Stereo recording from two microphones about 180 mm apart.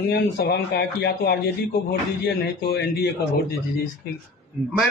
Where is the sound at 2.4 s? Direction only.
65° left (ahead or behind).